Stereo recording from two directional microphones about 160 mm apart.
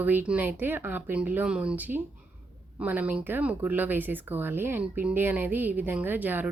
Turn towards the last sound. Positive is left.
turn(degrees=-10)  # may be behind; listen again after turning